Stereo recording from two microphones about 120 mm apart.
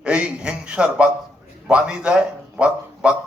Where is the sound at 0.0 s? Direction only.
10° right (ahead or behind).